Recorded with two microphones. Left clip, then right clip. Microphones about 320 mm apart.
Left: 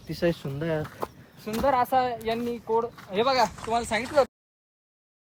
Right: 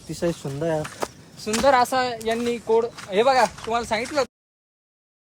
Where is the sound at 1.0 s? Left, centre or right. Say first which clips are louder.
Right 5 dB; right.